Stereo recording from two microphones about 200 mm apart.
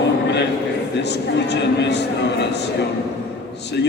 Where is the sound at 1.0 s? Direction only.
60° left (ahead or behind).